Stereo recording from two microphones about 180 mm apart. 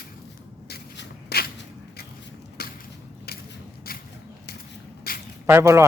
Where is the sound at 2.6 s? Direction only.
60° left (ahead or behind).